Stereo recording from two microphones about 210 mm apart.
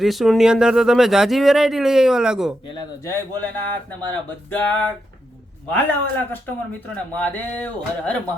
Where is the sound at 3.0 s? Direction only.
15° left (ahead or behind).